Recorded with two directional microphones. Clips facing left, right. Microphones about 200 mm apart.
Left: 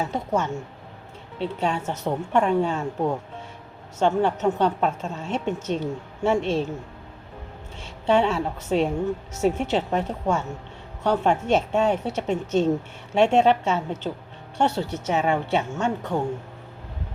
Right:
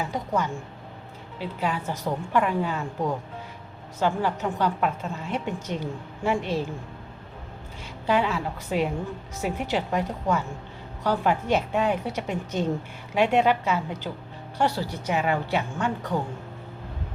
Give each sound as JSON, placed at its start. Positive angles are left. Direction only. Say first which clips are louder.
{"t": 0.0, "sound": "a woman's voice", "louder": "left 2 dB", "side_deg": 25}
{"t": 4.2, "sound": "a woman's voice", "louder": "left 5 dB", "side_deg": 25}
{"t": 8.0, "sound": "a woman's voice", "louder": "left 4 dB", "side_deg": 25}